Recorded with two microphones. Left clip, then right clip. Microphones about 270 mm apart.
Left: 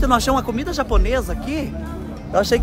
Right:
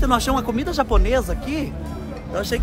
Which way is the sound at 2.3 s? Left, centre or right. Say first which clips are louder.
Left 7 dB; centre.